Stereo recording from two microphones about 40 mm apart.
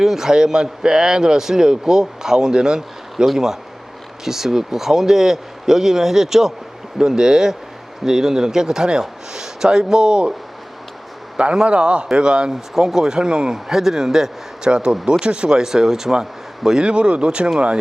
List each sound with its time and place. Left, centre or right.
0.0 s a man's voice: centre
11.5 s a man's voice: right
16.9 s speech: right